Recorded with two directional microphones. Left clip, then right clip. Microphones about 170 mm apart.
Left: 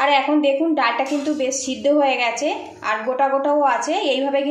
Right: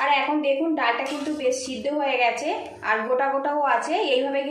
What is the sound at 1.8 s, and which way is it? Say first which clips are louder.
A woman's voice: left 8 dB; 45° left (ahead or behind).